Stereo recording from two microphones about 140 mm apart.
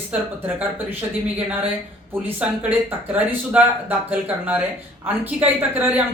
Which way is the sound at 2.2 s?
10° right (ahead or behind).